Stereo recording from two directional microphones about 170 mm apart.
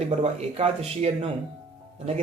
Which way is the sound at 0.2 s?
40° right (ahead or behind).